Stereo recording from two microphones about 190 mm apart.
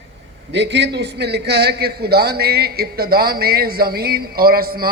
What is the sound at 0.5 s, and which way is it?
A man's voice, 65° right (ahead or behind).